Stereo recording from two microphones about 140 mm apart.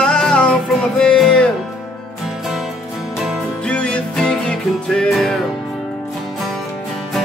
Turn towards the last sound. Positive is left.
turn(degrees=0)  # may be behind; listen again after turning